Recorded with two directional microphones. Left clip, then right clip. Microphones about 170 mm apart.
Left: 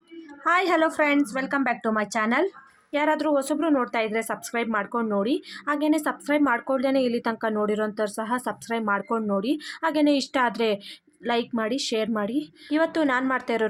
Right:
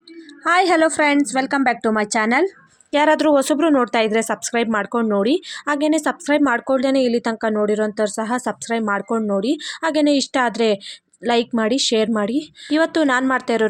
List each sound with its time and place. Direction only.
0.4 s a woman's voice: 30° right (ahead or behind)